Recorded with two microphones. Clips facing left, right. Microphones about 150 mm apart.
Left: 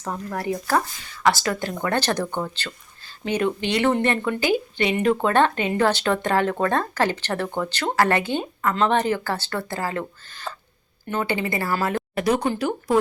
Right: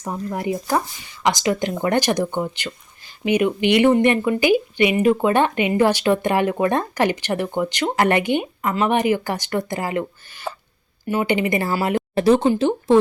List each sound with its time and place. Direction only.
0.0 s speech: 15° right (ahead or behind)
12.1 s speech: 30° right (ahead or behind)